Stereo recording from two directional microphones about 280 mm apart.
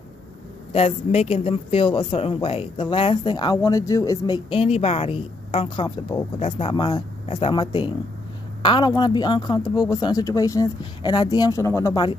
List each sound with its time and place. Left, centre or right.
0.7 s a woman's voice: left